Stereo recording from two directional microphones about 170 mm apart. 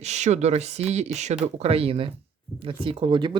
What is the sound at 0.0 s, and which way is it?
Speech, 40° right (ahead or behind).